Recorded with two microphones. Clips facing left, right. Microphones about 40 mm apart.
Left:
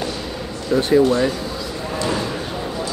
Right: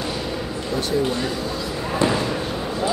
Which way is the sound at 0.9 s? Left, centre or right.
Left.